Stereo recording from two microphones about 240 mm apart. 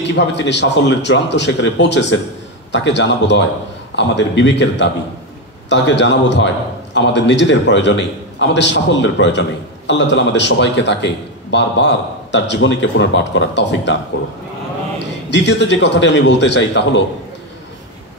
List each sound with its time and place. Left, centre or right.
0.0 s a man's voice: left
15.2 s a man's voice: left